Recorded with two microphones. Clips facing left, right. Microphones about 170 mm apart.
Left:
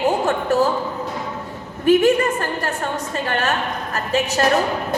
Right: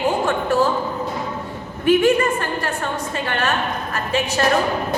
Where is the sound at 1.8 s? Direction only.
40° left (ahead or behind).